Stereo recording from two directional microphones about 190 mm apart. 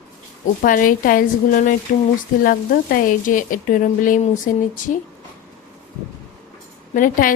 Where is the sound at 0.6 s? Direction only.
45° left (ahead or behind).